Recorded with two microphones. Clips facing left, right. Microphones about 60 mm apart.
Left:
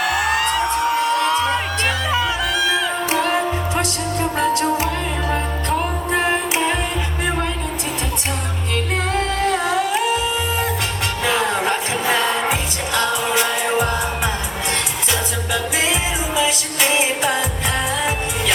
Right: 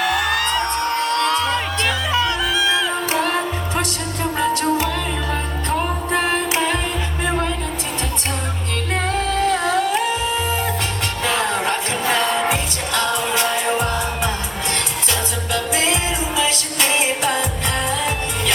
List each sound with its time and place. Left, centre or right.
0.0 s music: centre
2.6 s music: left
4.4 s music: centre
9.1 s music: centre
11.3 s music: centre
15.5 s music: centre